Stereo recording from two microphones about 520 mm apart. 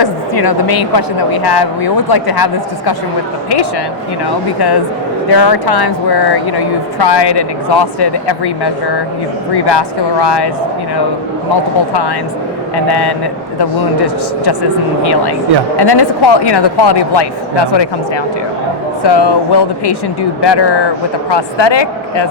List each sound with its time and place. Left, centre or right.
0.0 s speech: left
5.3 s speech: left
12.7 s speech: left